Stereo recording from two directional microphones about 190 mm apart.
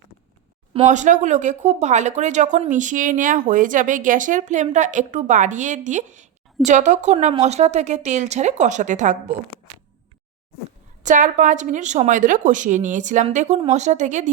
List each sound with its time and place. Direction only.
0.7 s speech: 40° right (ahead or behind)
11.0 s speech: 40° right (ahead or behind)